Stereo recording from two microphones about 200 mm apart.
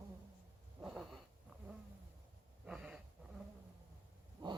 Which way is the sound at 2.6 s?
5° right (ahead or behind).